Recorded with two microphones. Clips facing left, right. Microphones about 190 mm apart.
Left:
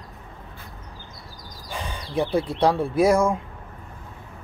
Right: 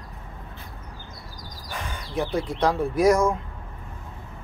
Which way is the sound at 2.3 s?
30° left (ahead or behind).